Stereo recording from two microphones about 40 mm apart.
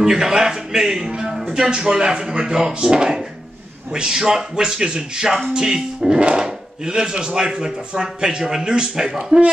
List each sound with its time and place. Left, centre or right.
0.0 s speech: centre